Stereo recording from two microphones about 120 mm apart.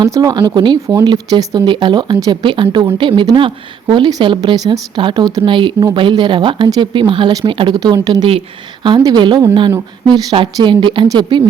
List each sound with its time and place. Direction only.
0.0 s speech: 30° right (ahead or behind)